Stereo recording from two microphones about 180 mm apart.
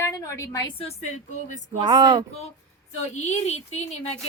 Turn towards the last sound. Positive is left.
turn(degrees=35)  # may be behind; listen again after turning